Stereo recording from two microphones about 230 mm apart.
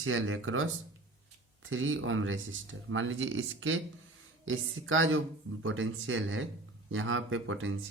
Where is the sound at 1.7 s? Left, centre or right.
Right.